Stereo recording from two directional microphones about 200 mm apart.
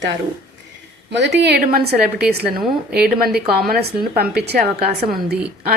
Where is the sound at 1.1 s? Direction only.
60° right (ahead or behind).